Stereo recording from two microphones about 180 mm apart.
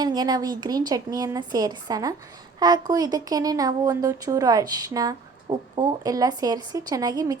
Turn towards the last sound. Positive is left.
turn(degrees=-20)  # may be behind; listen again after turning